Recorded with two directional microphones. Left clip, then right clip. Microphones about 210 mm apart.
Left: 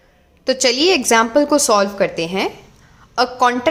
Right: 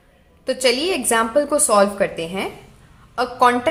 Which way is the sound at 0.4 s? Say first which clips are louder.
Left 4 dB; 30° left (ahead or behind).